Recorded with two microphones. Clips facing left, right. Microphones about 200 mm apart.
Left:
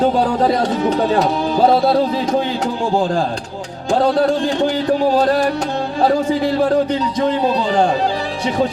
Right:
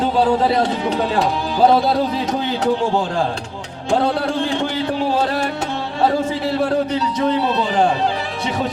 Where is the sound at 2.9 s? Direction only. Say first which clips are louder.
Left 2 dB; 40° left (ahead or behind).